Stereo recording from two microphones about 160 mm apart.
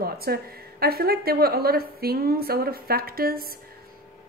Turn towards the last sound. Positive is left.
turn(degrees=-70)  # may be behind; listen again after turning